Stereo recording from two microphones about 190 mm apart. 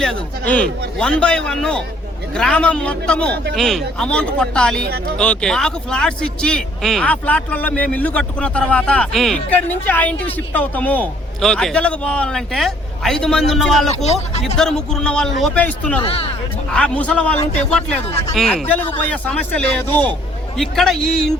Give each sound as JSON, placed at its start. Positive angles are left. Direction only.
{"t": 0.0, "sound": "speech", "side_deg": 5}
{"t": 4.8, "sound": "speech", "side_deg": -55}
{"t": 5.1, "sound": "speech", "side_deg": 5}
{"t": 13.9, "sound": "speech", "side_deg": 35}
{"t": 14.6, "sound": "speech", "side_deg": 5}
{"t": 16.0, "sound": "speech", "side_deg": 30}
{"t": 16.7, "sound": "speech", "side_deg": 5}
{"t": 18.1, "sound": "speech", "side_deg": 35}
{"t": 18.3, "sound": "speech", "side_deg": 0}